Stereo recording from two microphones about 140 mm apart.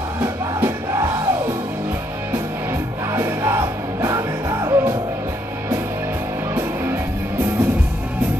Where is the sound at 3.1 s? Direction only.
20° right (ahead or behind).